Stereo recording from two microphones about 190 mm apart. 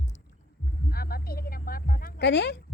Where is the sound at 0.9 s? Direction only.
50° left (ahead or behind).